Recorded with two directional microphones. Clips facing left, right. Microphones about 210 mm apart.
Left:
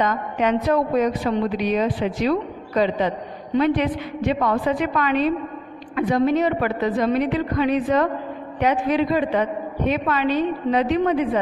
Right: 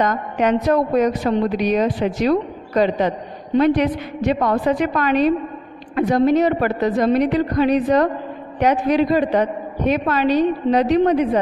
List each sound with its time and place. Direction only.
0.0 s a woman's voice: 45° right (ahead or behind)